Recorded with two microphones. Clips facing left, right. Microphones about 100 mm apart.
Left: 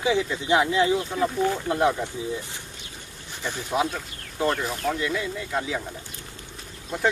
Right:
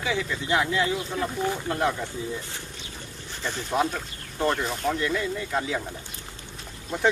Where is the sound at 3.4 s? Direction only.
10° left (ahead or behind).